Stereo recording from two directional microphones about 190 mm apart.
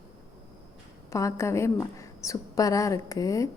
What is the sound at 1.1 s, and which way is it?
A woman's voice, 15° left (ahead or behind).